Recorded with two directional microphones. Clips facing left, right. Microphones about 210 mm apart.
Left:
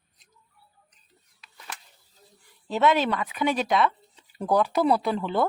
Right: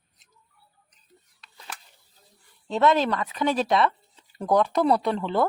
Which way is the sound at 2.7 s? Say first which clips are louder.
Right 1 dB; centre (ahead or behind).